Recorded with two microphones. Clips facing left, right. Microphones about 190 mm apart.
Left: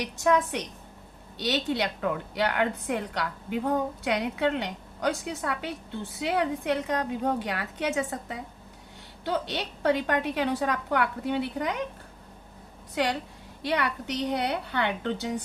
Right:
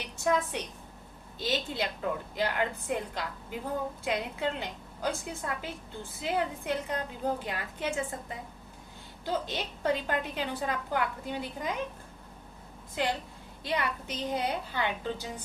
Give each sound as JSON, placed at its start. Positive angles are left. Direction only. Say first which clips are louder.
{"t": 0.0, "sound": "a woman's voice", "louder": "left 5 dB", "side_deg": 75}
{"t": 13.6, "sound": "a woman's voice", "louder": "left 4 dB", "side_deg": 70}